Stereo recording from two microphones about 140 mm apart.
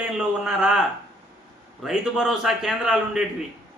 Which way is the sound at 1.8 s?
Centre (ahead or behind).